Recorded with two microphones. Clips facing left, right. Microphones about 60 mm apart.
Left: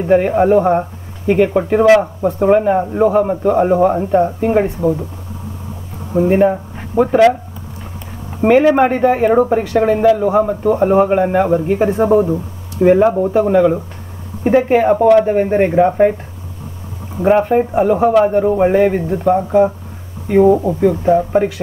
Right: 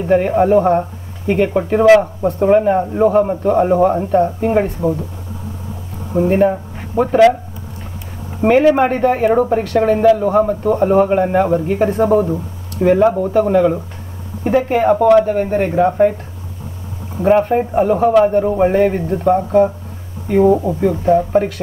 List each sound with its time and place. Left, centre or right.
0.0 s a man's voice: centre
6.1 s speech: centre
8.4 s a man's voice: centre
10.7 s a man's voice: centre
11.1 s a man's voice: centre
14.4 s speech: left
17.2 s a man's voice: centre
20.9 s a man's voice: centre